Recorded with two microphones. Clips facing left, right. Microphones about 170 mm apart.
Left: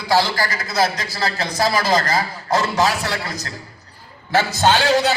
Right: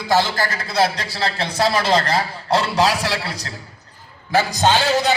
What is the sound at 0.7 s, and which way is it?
A man's voice, 30° right (ahead or behind).